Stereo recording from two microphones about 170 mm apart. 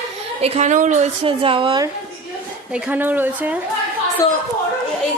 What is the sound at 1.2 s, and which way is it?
Speech, 30° right (ahead or behind).